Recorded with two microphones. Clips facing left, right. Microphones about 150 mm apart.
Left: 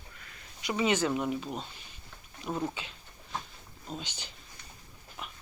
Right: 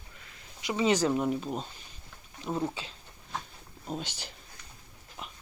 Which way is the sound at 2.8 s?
35° right (ahead or behind).